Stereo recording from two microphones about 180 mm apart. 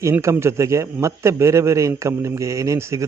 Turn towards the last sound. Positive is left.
turn(degrees=-15)  # may be behind; listen again after turning